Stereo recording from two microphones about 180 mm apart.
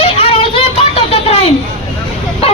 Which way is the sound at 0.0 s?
30° left (ahead or behind).